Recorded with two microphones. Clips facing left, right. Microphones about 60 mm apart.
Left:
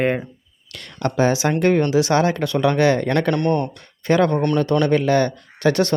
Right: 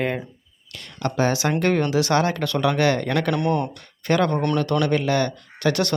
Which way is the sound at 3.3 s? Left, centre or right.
Centre.